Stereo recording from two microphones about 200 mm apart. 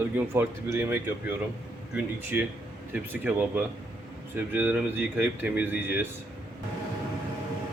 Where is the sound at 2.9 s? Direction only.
10° right (ahead or behind).